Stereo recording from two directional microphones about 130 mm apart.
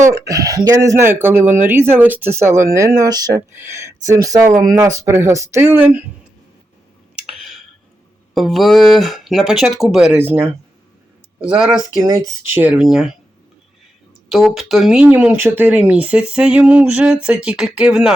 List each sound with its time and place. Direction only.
0.0 s speech: 25° right (ahead or behind)
7.3 s a sound: centre (ahead or behind)
8.4 s speech: centre (ahead or behind)
10.2 s speech: 15° right (ahead or behind)
11.9 s speech: 30° right (ahead or behind)
12.5 s speech: 10° right (ahead or behind)
14.3 s speech: centre (ahead or behind)